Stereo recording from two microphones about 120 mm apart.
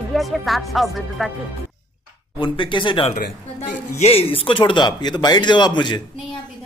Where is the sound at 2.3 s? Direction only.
45° left (ahead or behind).